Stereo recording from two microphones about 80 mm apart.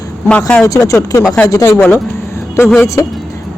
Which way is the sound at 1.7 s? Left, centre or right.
Centre.